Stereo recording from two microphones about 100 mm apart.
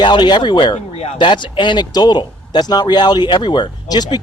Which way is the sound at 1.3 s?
55° left (ahead or behind).